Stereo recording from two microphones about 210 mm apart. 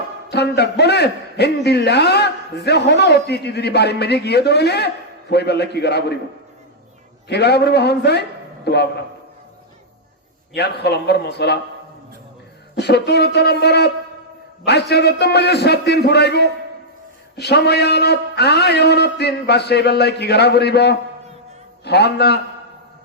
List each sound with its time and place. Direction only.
0.3 s a man's voice: 50° left (ahead or behind)
7.3 s a man's voice: 50° left (ahead or behind)
10.5 s a man's voice: 50° left (ahead or behind)
12.7 s a man's voice: 50° left (ahead or behind)